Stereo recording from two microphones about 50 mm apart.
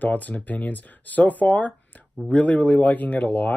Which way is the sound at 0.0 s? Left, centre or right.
Left.